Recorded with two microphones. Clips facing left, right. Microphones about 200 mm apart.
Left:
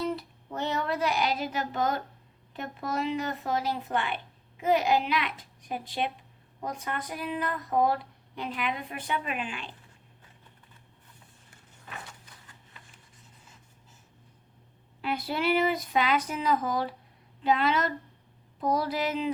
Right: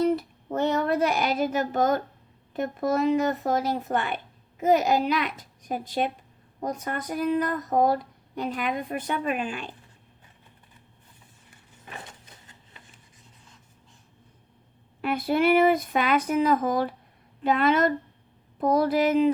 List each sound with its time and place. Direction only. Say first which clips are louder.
0.0 s child singing: right 8 dB; 50° right (ahead or behind)
2.5 s speech: right 8 dB; 45° right (ahead or behind)
12.0 s a sound: right 2 dB; 20° right (ahead or behind)
15.0 s speech: right 6 dB; 50° right (ahead or behind)